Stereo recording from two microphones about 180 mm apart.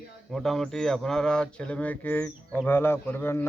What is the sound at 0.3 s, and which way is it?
A man's voice, centre (ahead or behind).